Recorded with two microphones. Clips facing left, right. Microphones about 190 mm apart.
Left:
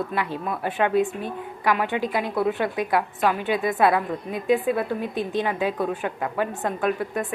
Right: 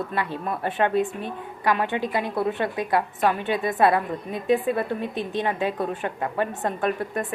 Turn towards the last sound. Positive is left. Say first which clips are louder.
# left 1 dB
turn(degrees=5)  # may be behind; listen again after turning